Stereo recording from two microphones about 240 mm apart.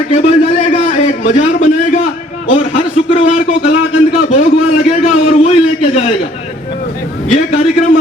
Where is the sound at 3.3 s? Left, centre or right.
Left.